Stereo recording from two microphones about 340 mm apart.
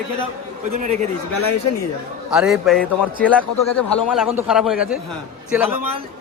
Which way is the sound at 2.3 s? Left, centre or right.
Centre.